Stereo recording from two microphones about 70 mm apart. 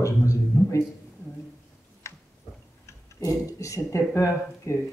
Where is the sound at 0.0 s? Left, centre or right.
Left.